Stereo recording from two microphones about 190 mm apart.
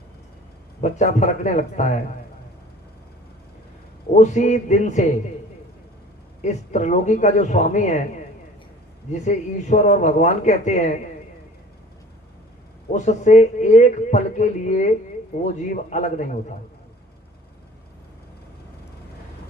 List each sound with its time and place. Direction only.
0.8 s speech: 40° left (ahead or behind)
4.2 s speech: 40° left (ahead or behind)
6.4 s speech: 40° left (ahead or behind)
9.1 s speech: 40° left (ahead or behind)
12.9 s speech: 40° left (ahead or behind)